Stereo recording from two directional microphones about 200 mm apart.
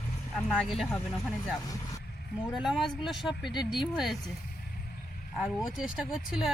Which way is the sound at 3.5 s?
20° left (ahead or behind).